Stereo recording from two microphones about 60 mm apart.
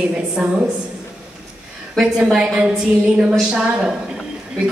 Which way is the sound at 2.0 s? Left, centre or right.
Centre.